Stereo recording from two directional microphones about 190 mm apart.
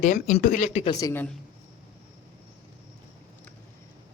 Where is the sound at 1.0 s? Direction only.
15° left (ahead or behind).